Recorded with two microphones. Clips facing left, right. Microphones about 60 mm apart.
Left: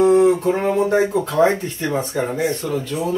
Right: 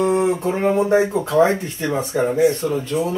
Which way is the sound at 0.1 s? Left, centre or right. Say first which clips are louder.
Left 5 dB; centre.